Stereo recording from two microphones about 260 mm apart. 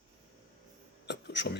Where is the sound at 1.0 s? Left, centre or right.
Left.